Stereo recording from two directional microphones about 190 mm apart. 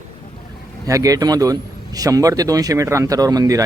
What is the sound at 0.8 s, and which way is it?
A man's voice, 20° right (ahead or behind).